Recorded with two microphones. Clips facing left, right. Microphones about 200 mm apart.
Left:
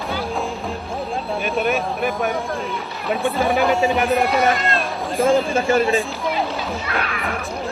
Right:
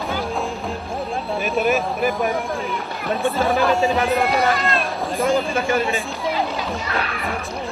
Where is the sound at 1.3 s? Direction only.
Centre (ahead or behind).